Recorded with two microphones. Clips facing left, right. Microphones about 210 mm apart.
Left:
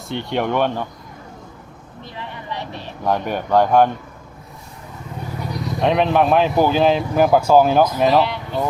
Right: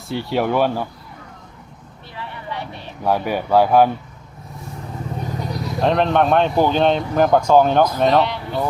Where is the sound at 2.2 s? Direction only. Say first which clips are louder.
Even; 20° left (ahead or behind).